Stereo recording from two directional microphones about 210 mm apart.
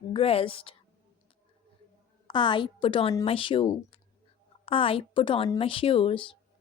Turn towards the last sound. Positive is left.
turn(degrees=25)  # may be behind; listen again after turning